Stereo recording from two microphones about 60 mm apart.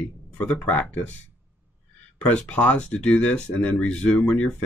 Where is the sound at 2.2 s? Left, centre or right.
Left.